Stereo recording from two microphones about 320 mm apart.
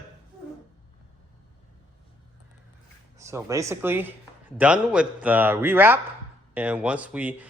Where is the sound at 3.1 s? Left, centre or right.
Centre.